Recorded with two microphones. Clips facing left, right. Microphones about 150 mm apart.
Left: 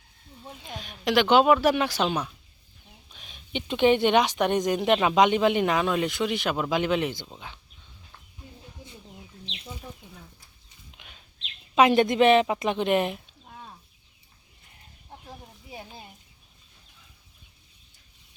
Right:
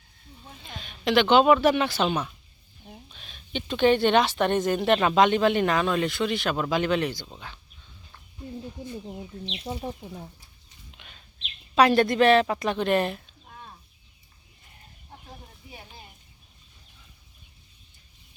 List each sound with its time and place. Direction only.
0.6 s speech: 10° left (ahead or behind)
9.8 s speech: 50° right (ahead or behind)
10.9 s a sound: 10° left (ahead or behind)
11.7 s speech: 20° left (ahead or behind)